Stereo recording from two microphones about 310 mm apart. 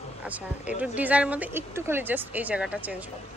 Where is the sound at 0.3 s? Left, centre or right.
Centre.